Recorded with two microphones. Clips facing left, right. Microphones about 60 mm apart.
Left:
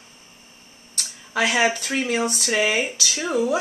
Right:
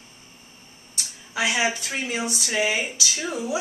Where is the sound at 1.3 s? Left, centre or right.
Left.